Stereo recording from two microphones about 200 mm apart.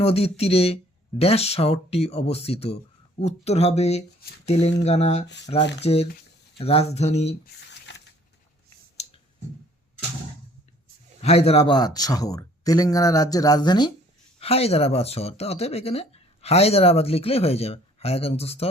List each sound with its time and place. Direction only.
0.0 s speech: 30° left (ahead or behind)
7.7 s a sound: 60° left (ahead or behind)
11.2 s speech: 30° left (ahead or behind)